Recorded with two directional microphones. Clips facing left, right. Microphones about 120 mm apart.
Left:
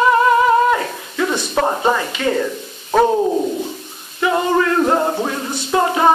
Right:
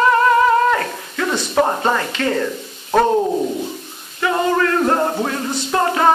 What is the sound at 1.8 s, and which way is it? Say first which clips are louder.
Speech: left 1 dB; 15° left (ahead or behind).